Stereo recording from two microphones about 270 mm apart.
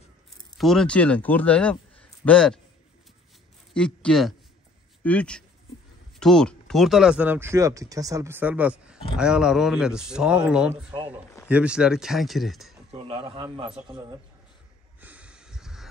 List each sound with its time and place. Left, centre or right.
0.6 s a man's voice: centre
3.7 s speech: centre
12.9 s a man's voice: centre
15.0 s snort: centre